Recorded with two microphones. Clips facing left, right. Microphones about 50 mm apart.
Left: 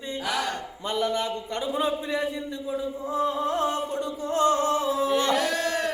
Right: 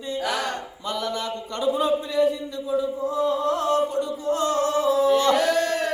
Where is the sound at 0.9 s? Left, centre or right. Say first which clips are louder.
Left 1 dB; left.